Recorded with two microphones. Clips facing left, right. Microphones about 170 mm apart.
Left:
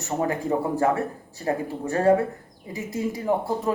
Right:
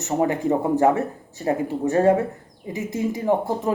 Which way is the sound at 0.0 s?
25° right (ahead or behind).